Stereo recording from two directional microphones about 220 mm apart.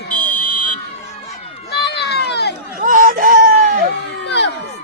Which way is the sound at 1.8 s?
50° left (ahead or behind).